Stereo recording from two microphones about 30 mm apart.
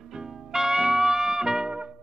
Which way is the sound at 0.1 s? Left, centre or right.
Centre.